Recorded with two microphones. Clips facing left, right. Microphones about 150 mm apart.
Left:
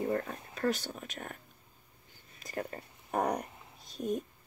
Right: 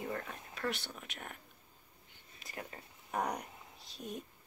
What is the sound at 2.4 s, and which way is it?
Speech, 45° left (ahead or behind).